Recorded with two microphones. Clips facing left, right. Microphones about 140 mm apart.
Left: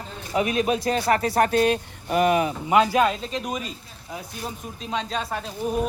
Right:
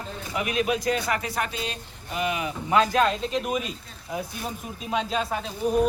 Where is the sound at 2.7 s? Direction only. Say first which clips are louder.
Left 1 dB; 10° left (ahead or behind).